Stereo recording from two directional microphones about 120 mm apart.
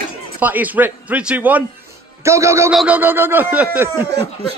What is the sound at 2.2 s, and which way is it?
Speech, 25° right (ahead or behind).